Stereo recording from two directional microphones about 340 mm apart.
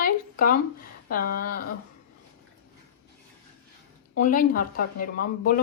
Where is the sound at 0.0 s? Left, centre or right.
Left.